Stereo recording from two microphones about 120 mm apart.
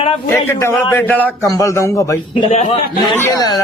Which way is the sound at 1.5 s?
25° left (ahead or behind).